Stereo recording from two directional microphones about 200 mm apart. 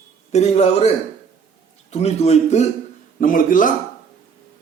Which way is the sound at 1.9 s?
30° left (ahead or behind).